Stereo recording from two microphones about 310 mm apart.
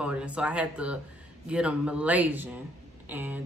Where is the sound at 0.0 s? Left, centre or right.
Centre.